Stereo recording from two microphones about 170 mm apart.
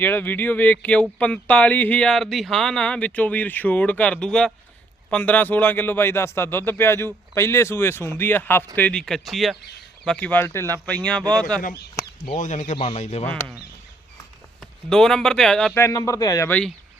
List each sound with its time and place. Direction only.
0.0 s speech: 10° left (ahead or behind)
11.6 s speech: 65° left (ahead or behind)
12.4 s speech: 45° left (ahead or behind)
12.7 s speech: 35° left (ahead or behind)
14.6 s speech: 5° left (ahead or behind)
15.8 s a man's voice: 20° left (ahead or behind)
16.5 s speech: 5° left (ahead or behind)